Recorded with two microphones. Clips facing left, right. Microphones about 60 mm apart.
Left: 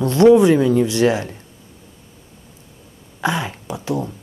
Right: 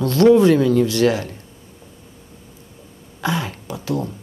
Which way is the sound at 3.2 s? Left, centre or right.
Left.